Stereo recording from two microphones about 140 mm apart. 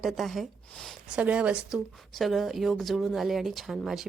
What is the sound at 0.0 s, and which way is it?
Speech, centre (ahead or behind).